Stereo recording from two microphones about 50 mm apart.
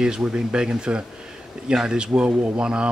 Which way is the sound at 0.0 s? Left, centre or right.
Centre.